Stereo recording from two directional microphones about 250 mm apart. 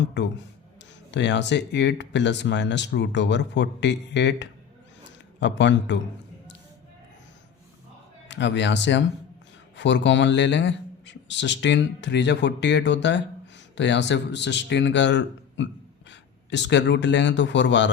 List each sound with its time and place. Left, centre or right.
0.2 s speech: left
8.3 s speech: left